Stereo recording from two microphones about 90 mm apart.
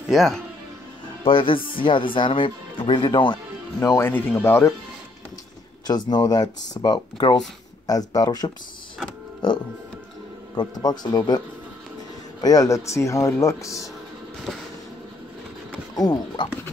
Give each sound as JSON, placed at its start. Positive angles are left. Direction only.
{"t": 0.1, "sound": "speech", "side_deg": 0}
{"t": 1.2, "sound": "speech", "side_deg": 80}
{"t": 3.9, "sound": "speech", "side_deg": 25}
{"t": 5.9, "sound": "speech", "side_deg": 50}
{"t": 7.8, "sound": "speech", "side_deg": 45}
{"t": 10.5, "sound": "a man's voice", "side_deg": 50}
{"t": 16.0, "sound": "speech", "side_deg": 55}